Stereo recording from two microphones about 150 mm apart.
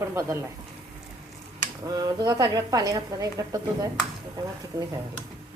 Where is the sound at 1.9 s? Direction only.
25° right (ahead or behind).